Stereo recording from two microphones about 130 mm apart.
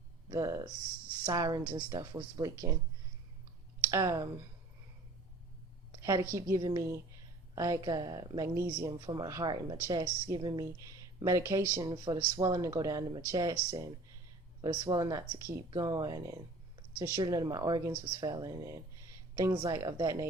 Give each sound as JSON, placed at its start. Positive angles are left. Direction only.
{"t": 0.3, "sound": "speech", "side_deg": -25}
{"t": 3.9, "sound": "speech", "side_deg": -25}
{"t": 6.0, "sound": "a sound", "side_deg": -25}
{"t": 6.3, "sound": "speech", "side_deg": -25}